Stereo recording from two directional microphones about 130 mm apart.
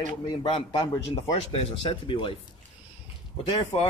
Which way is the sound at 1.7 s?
40° left (ahead or behind).